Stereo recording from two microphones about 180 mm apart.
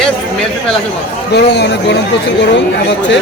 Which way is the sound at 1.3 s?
70° left (ahead or behind).